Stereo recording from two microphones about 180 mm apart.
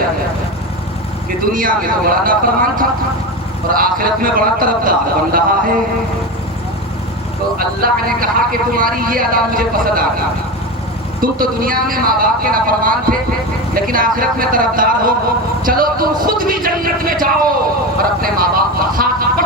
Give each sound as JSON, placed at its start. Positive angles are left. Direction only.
{"t": 1.5, "sound": "speech", "side_deg": -50}
{"t": 7.8, "sound": "speech", "side_deg": -55}
{"t": 11.2, "sound": "speech", "side_deg": -50}
{"t": 15.6, "sound": "a sound", "side_deg": -55}
{"t": 18.2, "sound": "vehicle", "side_deg": -55}